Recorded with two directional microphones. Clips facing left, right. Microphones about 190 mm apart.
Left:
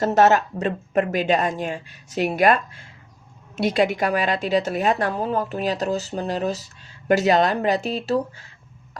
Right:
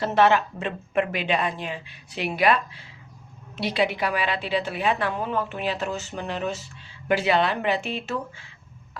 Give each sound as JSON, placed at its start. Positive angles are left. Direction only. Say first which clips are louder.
{"t": 0.0, "sound": "a woman's voice", "louder": "left 3 dB", "side_deg": 45}